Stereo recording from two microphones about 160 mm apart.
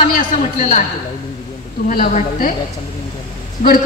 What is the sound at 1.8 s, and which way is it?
Speech, 65° left (ahead or behind).